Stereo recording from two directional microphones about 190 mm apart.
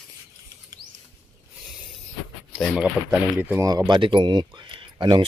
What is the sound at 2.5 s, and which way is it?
Speech, 5° right (ahead or behind).